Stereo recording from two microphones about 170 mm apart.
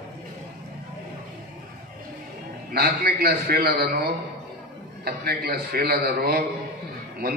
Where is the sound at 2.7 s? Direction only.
65° right (ahead or behind).